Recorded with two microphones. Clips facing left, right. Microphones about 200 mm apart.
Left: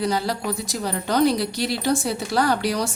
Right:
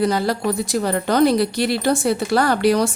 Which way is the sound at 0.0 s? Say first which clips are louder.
Right 5 dB; 55° right (ahead or behind).